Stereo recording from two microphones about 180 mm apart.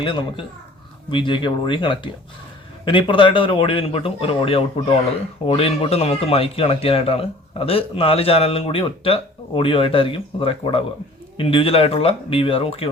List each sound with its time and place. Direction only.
0.0 s speech: 30° left (ahead or behind)